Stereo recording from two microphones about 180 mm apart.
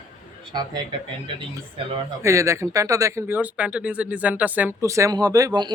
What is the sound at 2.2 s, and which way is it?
Speech, 15° right (ahead or behind).